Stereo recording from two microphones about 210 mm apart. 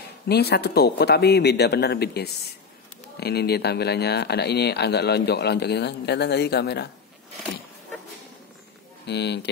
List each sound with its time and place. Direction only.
0.3 s speech: 50° left (ahead or behind)
9.0 s speech: 55° left (ahead or behind)